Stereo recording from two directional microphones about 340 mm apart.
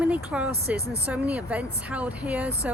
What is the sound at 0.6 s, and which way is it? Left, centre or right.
Speech, right.